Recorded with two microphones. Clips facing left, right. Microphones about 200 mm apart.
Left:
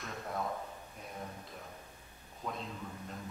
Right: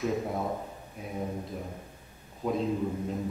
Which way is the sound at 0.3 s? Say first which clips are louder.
Right 6 dB; 20° right (ahead or behind).